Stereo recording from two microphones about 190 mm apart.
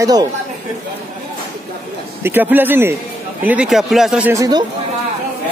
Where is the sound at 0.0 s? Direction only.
20° right (ahead or behind).